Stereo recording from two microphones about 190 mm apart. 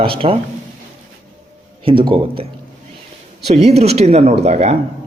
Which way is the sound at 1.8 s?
25° right (ahead or behind).